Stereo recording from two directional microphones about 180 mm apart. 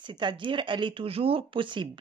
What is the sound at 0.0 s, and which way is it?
Speech, 25° right (ahead or behind).